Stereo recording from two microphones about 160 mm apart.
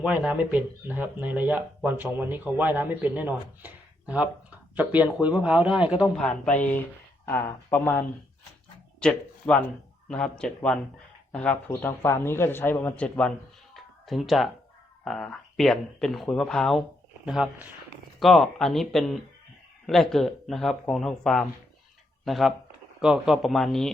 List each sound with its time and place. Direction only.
0.0 s speech: 5° right (ahead or behind)
6.1 s speech: 5° left (ahead or behind)
13.7 s a sound: centre (ahead or behind)
15.0 s speech: 5° left (ahead or behind)